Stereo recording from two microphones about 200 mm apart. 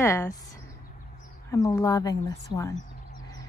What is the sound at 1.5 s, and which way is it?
Speech, 15° left (ahead or behind).